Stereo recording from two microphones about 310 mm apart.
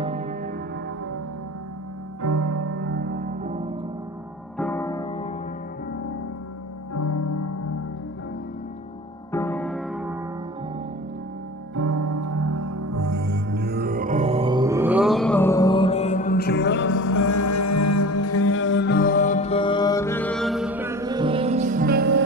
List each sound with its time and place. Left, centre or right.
0.0 s music: right
2.2 s music: right
2.7 s music: right
4.6 s music: centre
6.9 s music: left
9.3 s music: centre
11.7 s music: right
13.5 s music: right; by 17.0 s left
17.0 s music: left; by 22.2 s right